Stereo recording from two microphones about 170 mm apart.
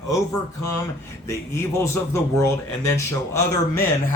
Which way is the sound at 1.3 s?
15° left (ahead or behind).